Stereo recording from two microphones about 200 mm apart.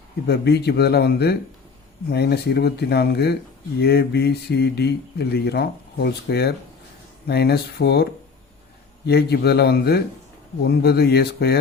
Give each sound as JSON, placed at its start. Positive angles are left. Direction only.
{"t": 0.3, "sound": "a man's voice", "side_deg": 55}